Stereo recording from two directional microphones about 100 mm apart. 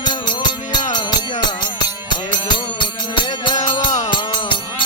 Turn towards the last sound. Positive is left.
turn(degrees=50)  # may be behind; listen again after turning